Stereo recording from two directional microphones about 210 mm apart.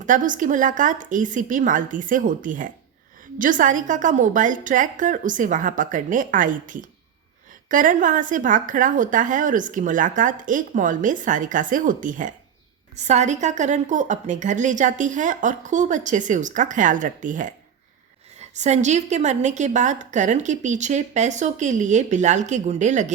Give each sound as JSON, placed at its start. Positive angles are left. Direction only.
{"t": 0.0, "sound": "a woman's voice", "side_deg": -40}